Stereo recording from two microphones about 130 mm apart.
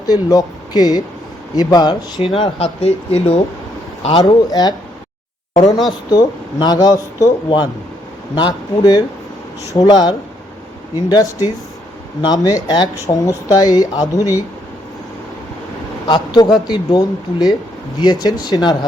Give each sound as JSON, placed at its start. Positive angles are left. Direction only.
{"t": 0.0, "sound": "speech", "side_deg": 30}
{"t": 4.1, "sound": "speech", "side_deg": 30}
{"t": 6.1, "sound": "speech", "side_deg": 30}
{"t": 16.0, "sound": "speech", "side_deg": 35}